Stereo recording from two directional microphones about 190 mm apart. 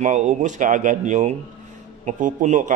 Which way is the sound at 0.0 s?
40° right (ahead or behind).